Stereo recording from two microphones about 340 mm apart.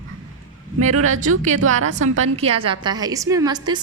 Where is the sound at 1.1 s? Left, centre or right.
Right.